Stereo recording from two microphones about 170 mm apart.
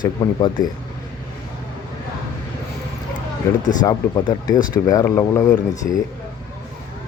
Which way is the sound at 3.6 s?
50° left (ahead or behind).